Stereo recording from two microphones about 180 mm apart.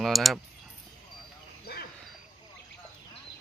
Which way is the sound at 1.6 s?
60° left (ahead or behind).